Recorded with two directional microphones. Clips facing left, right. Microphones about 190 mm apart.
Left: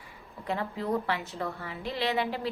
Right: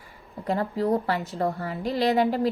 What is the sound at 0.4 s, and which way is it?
A woman's voice, 40° right (ahead or behind).